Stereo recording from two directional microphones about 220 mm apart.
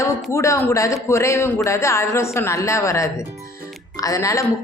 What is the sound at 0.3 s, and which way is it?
Speech, 15° left (ahead or behind).